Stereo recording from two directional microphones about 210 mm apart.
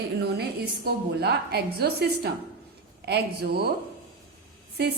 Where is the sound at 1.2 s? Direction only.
50° right (ahead or behind).